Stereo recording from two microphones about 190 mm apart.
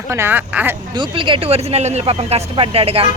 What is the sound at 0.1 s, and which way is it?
Speech, 10° right (ahead or behind).